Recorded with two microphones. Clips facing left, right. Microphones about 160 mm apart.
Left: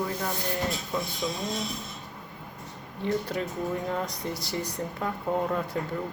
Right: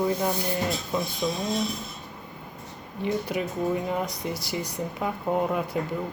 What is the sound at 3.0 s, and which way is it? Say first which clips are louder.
Speech: right 1 dB; 10° right (ahead or behind).